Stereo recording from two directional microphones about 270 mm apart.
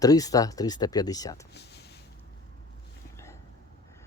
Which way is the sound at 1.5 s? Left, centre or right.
Left.